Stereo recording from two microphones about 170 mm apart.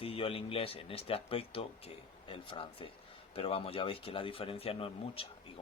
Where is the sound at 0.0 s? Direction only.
35° left (ahead or behind).